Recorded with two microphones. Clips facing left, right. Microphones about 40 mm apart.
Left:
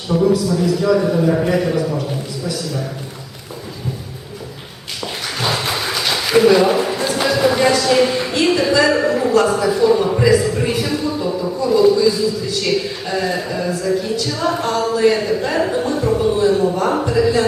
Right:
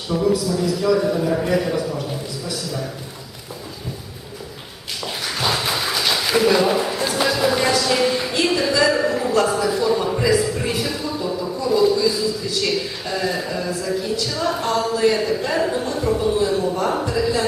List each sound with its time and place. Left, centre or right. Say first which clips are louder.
0.1 s a man's voice: left 4 dB; centre
5.4 s a man's voice: left 2 dB; centre